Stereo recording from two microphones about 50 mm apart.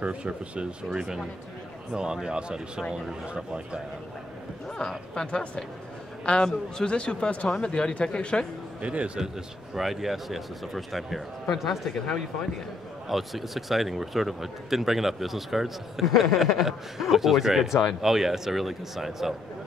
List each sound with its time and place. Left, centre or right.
0.0 s speech: right
4.7 s speech: centre
8.8 s speech: right
9.8 s speech: centre
13.1 s speech: centre